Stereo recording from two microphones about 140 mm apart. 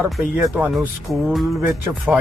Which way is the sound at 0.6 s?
10° right (ahead or behind).